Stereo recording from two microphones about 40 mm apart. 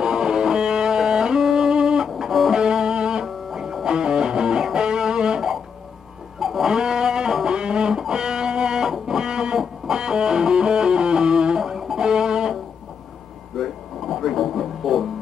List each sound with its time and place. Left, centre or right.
0.0 s music: centre
2.6 s music: centre
6.4 s a sound: centre
7.4 s music: right
13.6 s music: centre